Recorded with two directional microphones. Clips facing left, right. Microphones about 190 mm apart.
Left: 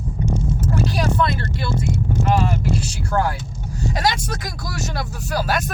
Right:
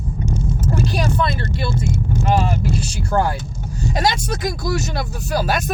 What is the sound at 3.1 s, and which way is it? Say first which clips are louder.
Speech: right 2 dB; 25° right (ahead or behind).